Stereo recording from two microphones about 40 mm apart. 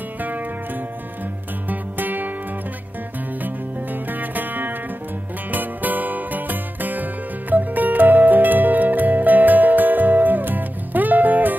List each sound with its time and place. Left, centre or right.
0.2 s music: right
1.7 s music: right
3.4 s music: right